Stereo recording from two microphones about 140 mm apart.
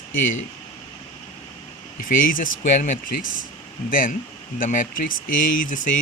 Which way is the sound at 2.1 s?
80° left.